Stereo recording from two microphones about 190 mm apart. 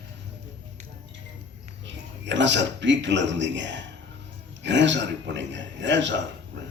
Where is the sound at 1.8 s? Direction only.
70° right (ahead or behind).